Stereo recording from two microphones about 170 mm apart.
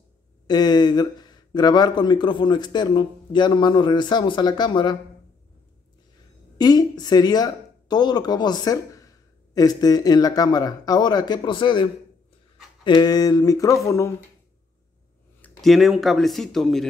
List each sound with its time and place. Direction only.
0.5 s speech: 25° left (ahead or behind)
6.6 s speech: 25° left (ahead or behind)
15.4 s speech: centre (ahead or behind)